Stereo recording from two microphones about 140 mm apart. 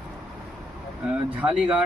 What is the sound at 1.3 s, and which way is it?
Speech, 10° right (ahead or behind).